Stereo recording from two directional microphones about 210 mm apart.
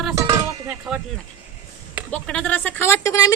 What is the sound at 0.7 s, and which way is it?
Speech, 5° right (ahead or behind).